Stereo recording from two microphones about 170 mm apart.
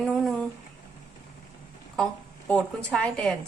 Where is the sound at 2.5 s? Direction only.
5° left (ahead or behind).